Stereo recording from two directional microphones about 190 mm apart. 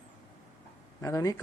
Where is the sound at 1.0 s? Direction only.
15° left (ahead or behind).